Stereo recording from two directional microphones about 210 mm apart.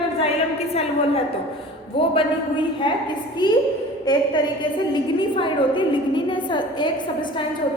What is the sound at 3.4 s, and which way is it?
Speech, 20° left (ahead or behind).